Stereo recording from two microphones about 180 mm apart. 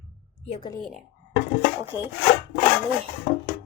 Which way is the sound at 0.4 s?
35° left (ahead or behind).